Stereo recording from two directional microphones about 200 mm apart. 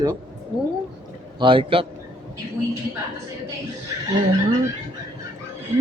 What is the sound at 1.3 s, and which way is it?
Speech, 25° right (ahead or behind).